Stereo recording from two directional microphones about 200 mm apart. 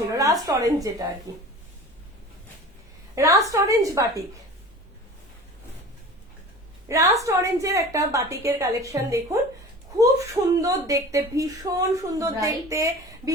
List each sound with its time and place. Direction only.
0.1 s a woman's voice: 15° right (ahead or behind)
3.2 s speech: 15° right (ahead or behind)
6.8 s speech: 15° right (ahead or behind)
10.6 s speech: 15° right (ahead or behind)